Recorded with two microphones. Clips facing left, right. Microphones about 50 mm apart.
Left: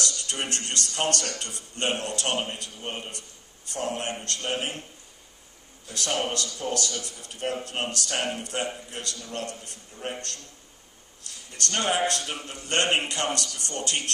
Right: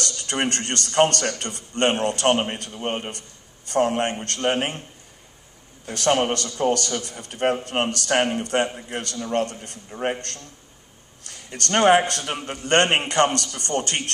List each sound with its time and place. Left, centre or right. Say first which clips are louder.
0.0 s a man's voice: right 6 dB; right
5.9 s a man's voice: right 8 dB; right
9.8 s a man's voice: right 10 dB; right
11.2 s a man's voice: right 4 dB; right